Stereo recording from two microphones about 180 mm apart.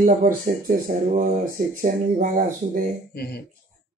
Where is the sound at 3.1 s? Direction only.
60° left (ahead or behind).